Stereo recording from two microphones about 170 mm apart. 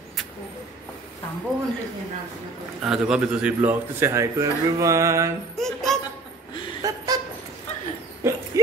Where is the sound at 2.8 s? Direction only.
5° right (ahead or behind).